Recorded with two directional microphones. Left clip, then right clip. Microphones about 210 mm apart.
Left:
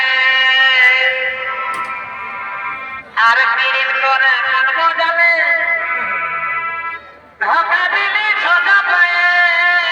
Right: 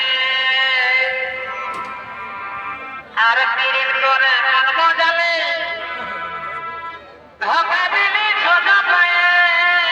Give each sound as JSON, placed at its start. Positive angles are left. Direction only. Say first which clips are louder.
{"t": 0.0, "sound": "music", "louder": "left 5 dB", "side_deg": 20}
{"t": 3.2, "sound": "music", "louder": "left 3 dB", "side_deg": 45}
{"t": 5.8, "sound": "music", "louder": "left 7 dB", "side_deg": 15}
{"t": 7.4, "sound": "music", "louder": "left 3 dB", "side_deg": 35}